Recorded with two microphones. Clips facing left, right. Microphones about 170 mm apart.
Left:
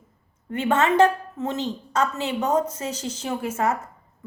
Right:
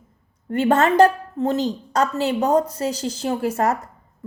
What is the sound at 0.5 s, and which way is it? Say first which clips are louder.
A woman's voice: right 4 dB; 35° right (ahead or behind).